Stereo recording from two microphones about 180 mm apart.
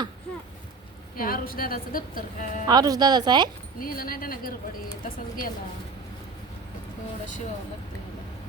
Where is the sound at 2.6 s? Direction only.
20° right (ahead or behind).